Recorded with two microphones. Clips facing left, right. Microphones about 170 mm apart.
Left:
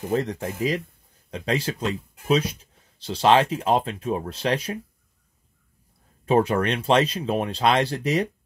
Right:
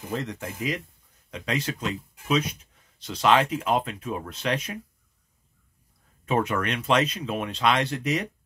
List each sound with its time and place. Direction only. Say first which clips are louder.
0.2 s speech: left 6 dB; 35° left (ahead or behind)
6.2 s speech: left 5 dB; 30° left (ahead or behind)